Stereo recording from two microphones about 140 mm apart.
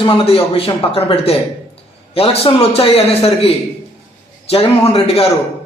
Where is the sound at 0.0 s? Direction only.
40° left (ahead or behind).